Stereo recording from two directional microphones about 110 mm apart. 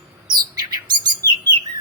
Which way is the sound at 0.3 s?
40° right (ahead or behind).